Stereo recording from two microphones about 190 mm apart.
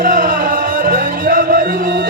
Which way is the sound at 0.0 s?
45° right (ahead or behind).